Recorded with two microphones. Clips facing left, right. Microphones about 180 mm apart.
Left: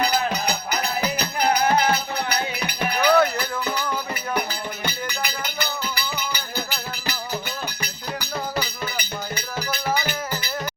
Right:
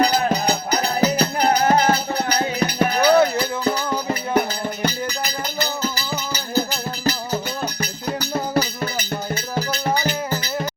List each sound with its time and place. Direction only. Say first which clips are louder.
0.0 s music: right 5 dB; 35° right (ahead or behind)
8.5 s music: right 6 dB; 40° right (ahead or behind)